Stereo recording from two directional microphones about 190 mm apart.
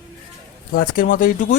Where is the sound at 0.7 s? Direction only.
50° left (ahead or behind).